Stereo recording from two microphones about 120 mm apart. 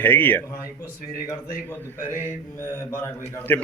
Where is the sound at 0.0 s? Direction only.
15° left (ahead or behind).